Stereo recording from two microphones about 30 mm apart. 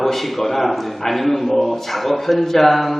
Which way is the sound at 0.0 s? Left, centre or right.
Centre.